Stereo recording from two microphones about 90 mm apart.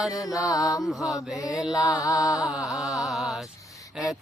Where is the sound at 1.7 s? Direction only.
40° left (ahead or behind).